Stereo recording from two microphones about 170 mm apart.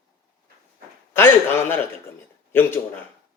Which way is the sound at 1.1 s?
15° left (ahead or behind).